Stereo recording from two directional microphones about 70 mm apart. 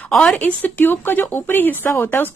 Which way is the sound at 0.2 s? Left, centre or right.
Left.